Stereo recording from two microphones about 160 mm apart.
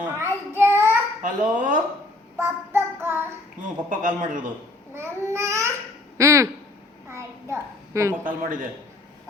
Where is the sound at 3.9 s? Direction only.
55° right (ahead or behind).